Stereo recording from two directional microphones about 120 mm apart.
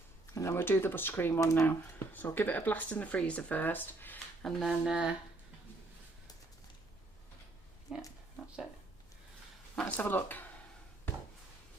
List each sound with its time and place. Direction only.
0.3 s speech: 25° left (ahead or behind)
4.4 s speech: 5° right (ahead or behind)
7.9 s speech: 5° right (ahead or behind)
9.7 s speech: 15° left (ahead or behind)